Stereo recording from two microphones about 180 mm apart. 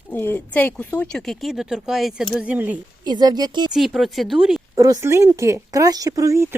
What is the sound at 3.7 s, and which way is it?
Speech, centre (ahead or behind).